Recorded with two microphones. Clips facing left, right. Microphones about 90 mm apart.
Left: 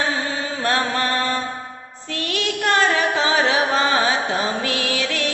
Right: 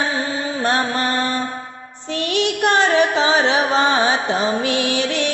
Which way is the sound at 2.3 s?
20° right (ahead or behind).